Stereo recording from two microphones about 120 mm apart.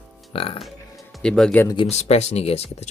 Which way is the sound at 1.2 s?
5° left (ahead or behind).